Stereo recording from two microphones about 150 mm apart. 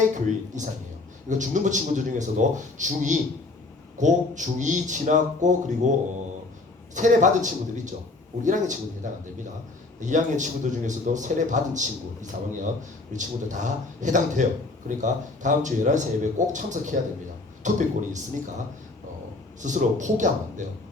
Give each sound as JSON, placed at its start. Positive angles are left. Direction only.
{"t": 0.1, "sound": "a man's voice", "side_deg": -55}
{"t": 6.9, "sound": "a man's voice", "side_deg": -55}
{"t": 19.6, "sound": "a man's voice", "side_deg": -55}